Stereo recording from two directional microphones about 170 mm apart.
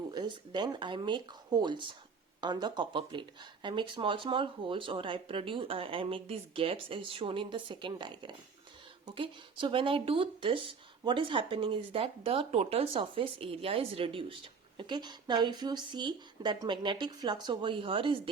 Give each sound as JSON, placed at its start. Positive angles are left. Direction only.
{"t": 0.1, "sound": "speech", "side_deg": -25}